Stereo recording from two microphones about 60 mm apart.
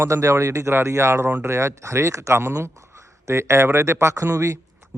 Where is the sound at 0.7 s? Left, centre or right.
Right.